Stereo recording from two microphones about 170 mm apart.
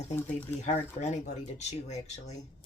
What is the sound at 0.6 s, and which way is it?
Speech, 40° left (ahead or behind).